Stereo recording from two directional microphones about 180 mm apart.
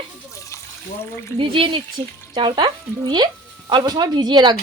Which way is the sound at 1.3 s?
30° right (ahead or behind).